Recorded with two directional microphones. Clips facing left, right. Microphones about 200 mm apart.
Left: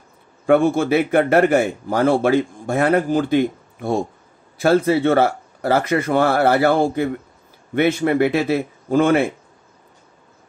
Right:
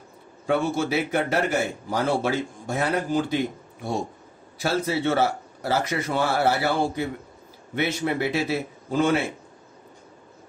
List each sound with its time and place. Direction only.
0.5 s a man's voice: 55° left (ahead or behind)